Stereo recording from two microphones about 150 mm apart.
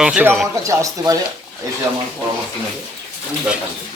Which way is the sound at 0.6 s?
20° right (ahead or behind).